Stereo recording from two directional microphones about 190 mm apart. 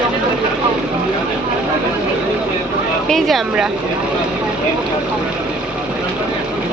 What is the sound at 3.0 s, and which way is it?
Speech, centre (ahead or behind).